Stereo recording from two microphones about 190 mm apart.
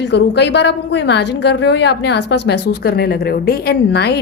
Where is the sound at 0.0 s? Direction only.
65° left (ahead or behind).